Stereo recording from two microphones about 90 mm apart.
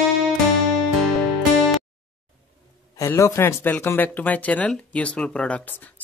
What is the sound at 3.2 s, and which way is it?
Speech, 30° left (ahead or behind).